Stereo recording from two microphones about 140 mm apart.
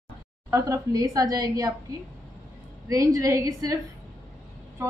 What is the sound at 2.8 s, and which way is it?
Speech, 25° right (ahead or behind).